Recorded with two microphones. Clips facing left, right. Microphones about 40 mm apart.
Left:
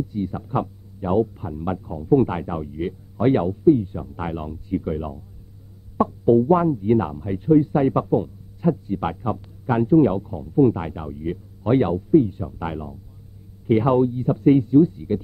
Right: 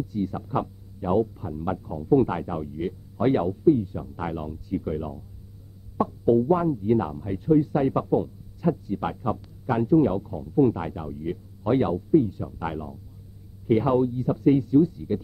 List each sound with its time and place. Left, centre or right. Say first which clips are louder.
0.1 s speech: left 2 dB; centre
1.2 s speech: left 2 dB; left
6.0 s speech: left 4 dB; left
12.6 s speech: left 1 dB; centre
13.7 s speech: left 3 dB; left